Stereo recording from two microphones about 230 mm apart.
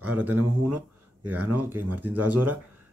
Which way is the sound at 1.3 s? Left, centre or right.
Right.